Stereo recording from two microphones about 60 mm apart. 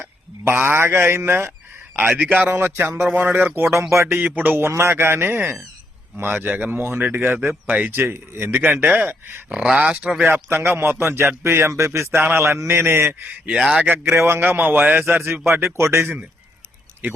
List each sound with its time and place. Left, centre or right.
0.0 s a man's voice: right
2.0 s speech: right
3.7 s a man's voice: right
4.1 s speech: right
4.7 s speech: right
9.5 s speech: centre
10.2 s a man's voice: right
13.6 s speech: centre
14.0 s a man's voice: right
17.0 s speech: right